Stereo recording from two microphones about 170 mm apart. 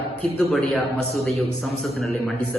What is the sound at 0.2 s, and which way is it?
A man's voice, 5° left (ahead or behind).